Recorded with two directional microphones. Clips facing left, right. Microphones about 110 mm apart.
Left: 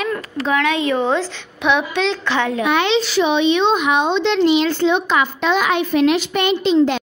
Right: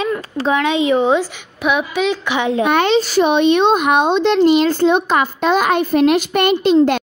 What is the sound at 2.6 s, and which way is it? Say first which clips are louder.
A child's voice: right 4 dB; 45° right (ahead or behind).